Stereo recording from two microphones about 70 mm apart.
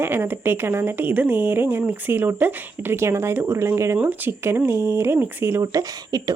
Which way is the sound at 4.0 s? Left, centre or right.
Right.